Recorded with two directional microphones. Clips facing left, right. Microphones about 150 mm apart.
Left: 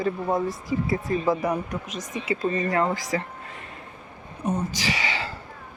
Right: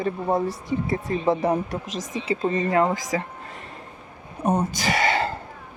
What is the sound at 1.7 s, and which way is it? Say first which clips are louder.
Speech: right 2 dB; 90° right.